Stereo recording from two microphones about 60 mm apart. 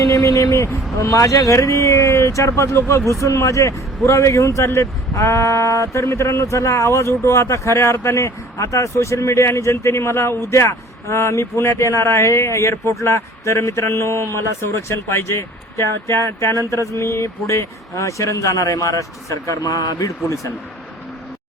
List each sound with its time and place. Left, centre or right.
0.0 s speech: left
16.6 s mantra: right
16.9 s speech: left